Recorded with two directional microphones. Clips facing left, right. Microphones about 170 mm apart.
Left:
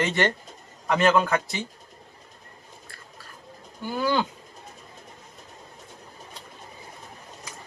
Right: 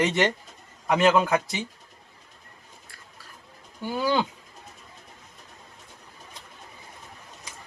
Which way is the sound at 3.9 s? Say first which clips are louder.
Even; 15° right (ahead or behind).